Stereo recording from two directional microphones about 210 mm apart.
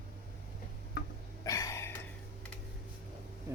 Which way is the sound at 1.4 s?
15° left (ahead or behind).